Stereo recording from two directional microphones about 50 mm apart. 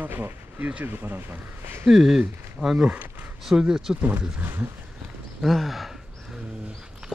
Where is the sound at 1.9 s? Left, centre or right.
Centre.